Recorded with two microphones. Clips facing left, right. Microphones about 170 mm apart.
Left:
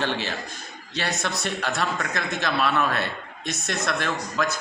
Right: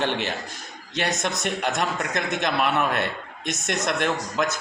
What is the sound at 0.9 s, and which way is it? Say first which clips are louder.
A man's voice: right 2 dB; 20° right (ahead or behind).